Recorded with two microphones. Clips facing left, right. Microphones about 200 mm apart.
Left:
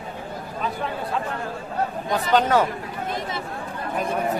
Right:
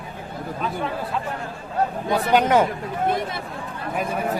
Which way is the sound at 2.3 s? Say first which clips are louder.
Right 1 dB; 15° right (ahead or behind).